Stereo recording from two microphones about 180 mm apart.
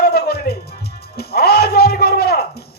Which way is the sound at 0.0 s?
60° left (ahead or behind).